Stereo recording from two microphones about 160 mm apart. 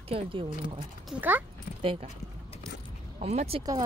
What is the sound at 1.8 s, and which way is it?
Speech, 35° right (ahead or behind).